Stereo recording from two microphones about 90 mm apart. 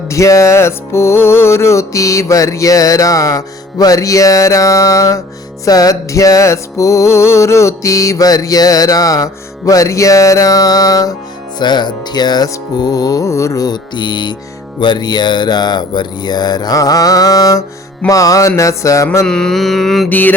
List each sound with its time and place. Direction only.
0.1 s music: 35° left (ahead or behind)
11.6 s music: 55° left (ahead or behind); by 19.0 s 35° left (ahead or behind)
19.2 s mantra: 10° left (ahead or behind)
20.1 s mantra: 20° left (ahead or behind)